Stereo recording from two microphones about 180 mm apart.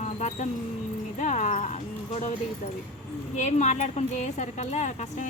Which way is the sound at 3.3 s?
40° left (ahead or behind).